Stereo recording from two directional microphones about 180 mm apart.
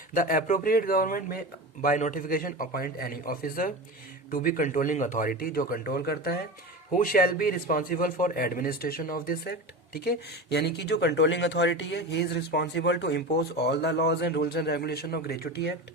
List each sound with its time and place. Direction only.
0.1 s a man's voice: 50° left (ahead or behind)